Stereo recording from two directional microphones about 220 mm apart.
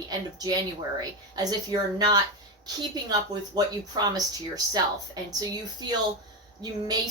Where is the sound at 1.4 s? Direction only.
20° right (ahead or behind).